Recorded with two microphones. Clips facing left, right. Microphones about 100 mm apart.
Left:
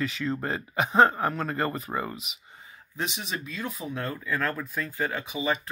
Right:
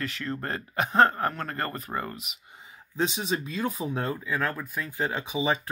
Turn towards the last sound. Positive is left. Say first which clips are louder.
# right 2 dB
turn(degrees=-25)  # may be behind; listen again after turning